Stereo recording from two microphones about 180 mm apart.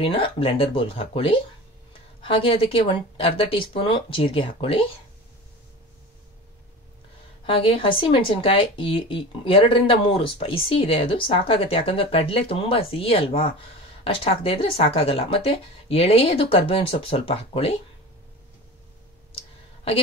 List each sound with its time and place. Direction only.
0.0 s speech: 30° left (ahead or behind)
7.4 s speech: 30° left (ahead or behind)
19.3 s clicking: 30° left (ahead or behind)